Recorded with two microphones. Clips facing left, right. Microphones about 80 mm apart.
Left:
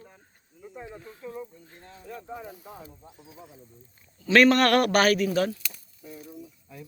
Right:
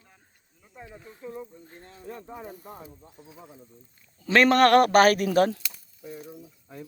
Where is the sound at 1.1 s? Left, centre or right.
Centre.